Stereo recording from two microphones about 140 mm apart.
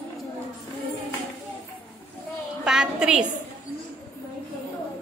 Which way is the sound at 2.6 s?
5° right (ahead or behind).